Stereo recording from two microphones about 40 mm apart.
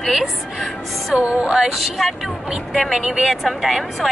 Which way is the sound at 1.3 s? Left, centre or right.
Right.